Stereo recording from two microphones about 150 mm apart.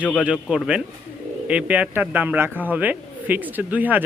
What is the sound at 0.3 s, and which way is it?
A man's voice, 5° right (ahead or behind).